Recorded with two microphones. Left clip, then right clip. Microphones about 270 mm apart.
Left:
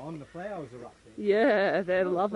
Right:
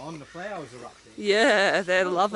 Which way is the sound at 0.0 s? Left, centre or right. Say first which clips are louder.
Right 3 dB; centre.